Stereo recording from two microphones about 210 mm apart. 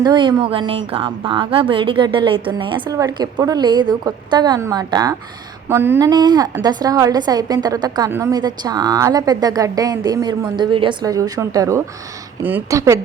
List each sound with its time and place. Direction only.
0.0 s a woman's voice: 20° right (ahead or behind)